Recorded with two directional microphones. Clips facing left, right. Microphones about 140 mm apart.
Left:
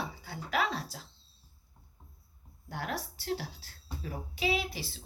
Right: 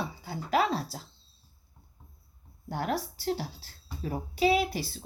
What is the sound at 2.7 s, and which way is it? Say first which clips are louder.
A woman's voice: right 6 dB; 35° right (ahead or behind).